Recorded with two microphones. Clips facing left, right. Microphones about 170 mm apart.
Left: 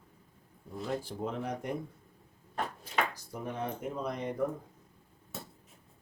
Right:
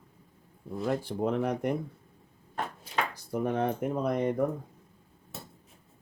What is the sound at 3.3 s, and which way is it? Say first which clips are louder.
Speech: right 10 dB; 60° right (ahead or behind).